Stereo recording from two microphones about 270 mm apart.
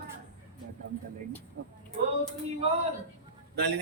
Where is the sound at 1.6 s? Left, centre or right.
Right.